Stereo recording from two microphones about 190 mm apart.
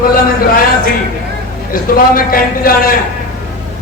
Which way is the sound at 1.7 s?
50° left (ahead or behind).